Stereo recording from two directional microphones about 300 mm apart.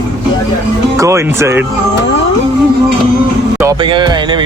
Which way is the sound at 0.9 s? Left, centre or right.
Centre.